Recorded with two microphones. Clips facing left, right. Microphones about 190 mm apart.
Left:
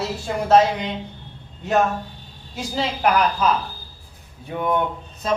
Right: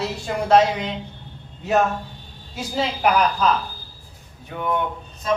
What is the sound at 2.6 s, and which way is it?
Speech, centre (ahead or behind).